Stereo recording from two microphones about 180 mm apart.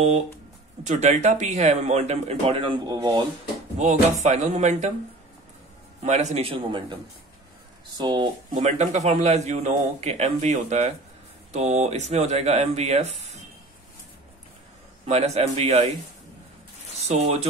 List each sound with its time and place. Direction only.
0.8 s a man's voice: 40° right (ahead or behind); by 3.3 s 25° right (ahead or behind)
3.7 s a man's voice: 40° right (ahead or behind)
6.0 s a man's voice: 40° right (ahead or behind)
8.0 s speech: 25° right (ahead or behind)
8.5 s a man's voice: 40° right (ahead or behind)
15.0 s a man's voice: 35° right (ahead or behind)
17.1 s a man's voice: 35° right (ahead or behind)